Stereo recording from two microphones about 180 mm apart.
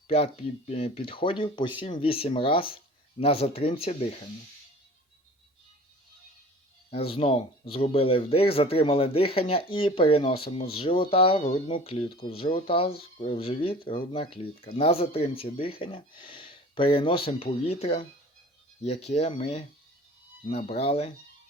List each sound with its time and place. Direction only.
0.1 s speech: 35° left (ahead or behind)
6.9 s speech: 30° left (ahead or behind)